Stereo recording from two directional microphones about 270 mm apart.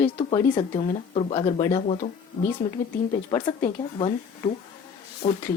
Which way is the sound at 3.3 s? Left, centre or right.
Centre.